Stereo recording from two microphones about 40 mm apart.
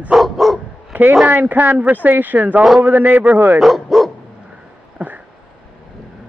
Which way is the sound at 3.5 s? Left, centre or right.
Centre.